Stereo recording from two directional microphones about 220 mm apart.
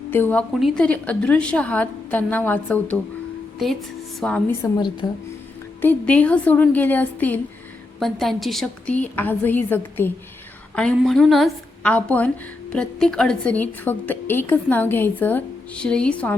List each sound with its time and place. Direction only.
0.1 s a woman's voice: 10° left (ahead or behind)
4.2 s a woman's voice: 5° left (ahead or behind)
5.0 s a woman's voice: 15° left (ahead or behind)